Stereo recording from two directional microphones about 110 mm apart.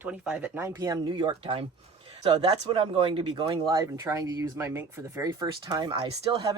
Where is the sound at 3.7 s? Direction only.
35° right (ahead or behind).